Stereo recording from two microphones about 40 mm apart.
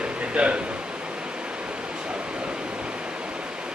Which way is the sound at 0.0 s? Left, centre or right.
Right.